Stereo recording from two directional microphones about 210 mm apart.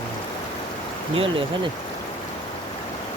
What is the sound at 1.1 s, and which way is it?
Speech, 25° right (ahead or behind).